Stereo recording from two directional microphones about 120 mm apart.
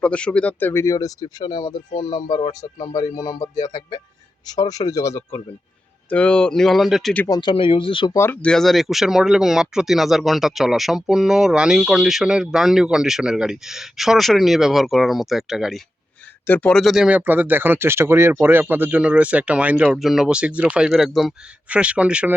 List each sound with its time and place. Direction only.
0.0 s speech: 10° left (ahead or behind); by 5.4 s 25° left (ahead or behind)
6.1 s a man's voice: 10° left (ahead or behind)
7.3 s speech: 35° left (ahead or behind)
7.5 s speech: 45° left (ahead or behind)
8.1 s speech: 20° left (ahead or behind)
8.4 s a man's voice: 5° left (ahead or behind)
16.5 s speech: 15° left (ahead or behind)
16.7 s speech: centre (ahead or behind)